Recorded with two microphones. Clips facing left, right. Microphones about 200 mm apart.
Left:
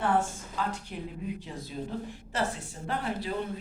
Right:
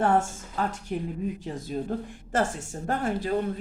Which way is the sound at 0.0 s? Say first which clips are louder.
Right 4 dB; 45° right (ahead or behind).